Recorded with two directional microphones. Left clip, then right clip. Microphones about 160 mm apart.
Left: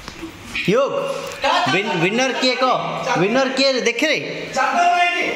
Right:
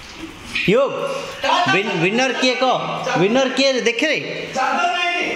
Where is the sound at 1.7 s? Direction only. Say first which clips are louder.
Even; 10° right (ahead or behind).